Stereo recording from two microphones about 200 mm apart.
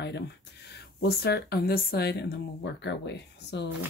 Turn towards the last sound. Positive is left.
turn(degrees=60)  # may be behind; listen again after turning